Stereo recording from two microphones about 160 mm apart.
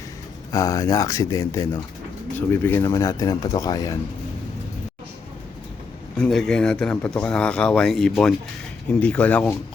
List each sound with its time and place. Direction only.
0.5 s speech: 20° left (ahead or behind)
6.1 s speech: 5° left (ahead or behind)